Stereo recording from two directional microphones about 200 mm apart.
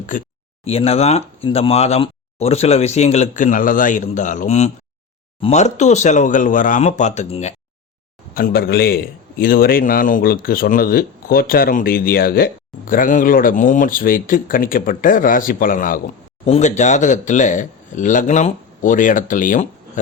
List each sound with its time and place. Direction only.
0.6 s speech: 30° left (ahead or behind)
8.4 s a man's voice: 50° left (ahead or behind)